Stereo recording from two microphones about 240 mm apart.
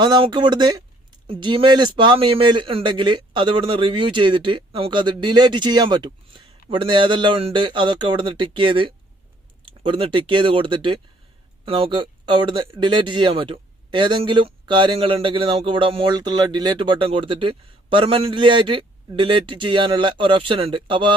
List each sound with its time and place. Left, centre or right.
0.0 s speech: centre